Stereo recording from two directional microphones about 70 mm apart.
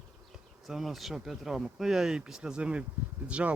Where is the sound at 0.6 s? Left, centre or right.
Centre.